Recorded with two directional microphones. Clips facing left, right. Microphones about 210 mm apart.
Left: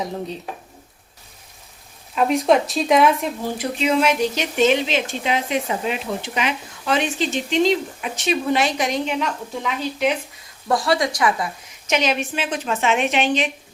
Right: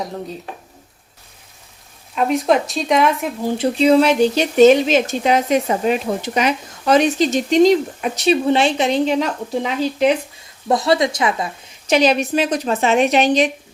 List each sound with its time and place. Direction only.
2.1 s speech: centre (ahead or behind)
3.6 s speech: 35° right (ahead or behind)
10.7 s speech: 20° right (ahead or behind)
11.9 s speech: 35° right (ahead or behind)